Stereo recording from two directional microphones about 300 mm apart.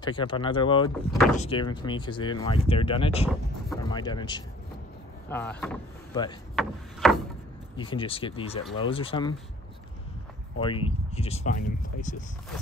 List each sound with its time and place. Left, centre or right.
0.0 s speech: centre
7.7 s speech: centre
10.6 s speech: centre